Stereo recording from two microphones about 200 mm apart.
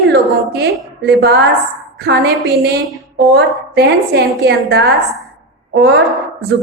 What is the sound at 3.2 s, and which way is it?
A woman's voice, 55° right (ahead or behind).